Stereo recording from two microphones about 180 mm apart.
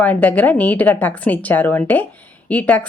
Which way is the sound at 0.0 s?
10° left (ahead or behind).